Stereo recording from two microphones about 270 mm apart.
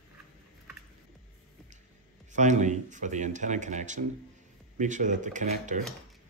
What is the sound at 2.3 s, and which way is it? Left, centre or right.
Speech, right.